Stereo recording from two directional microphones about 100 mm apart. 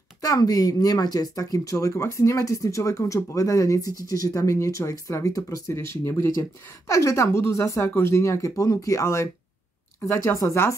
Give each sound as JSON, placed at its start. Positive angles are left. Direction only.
{"t": 0.2, "sound": "speech", "side_deg": 40}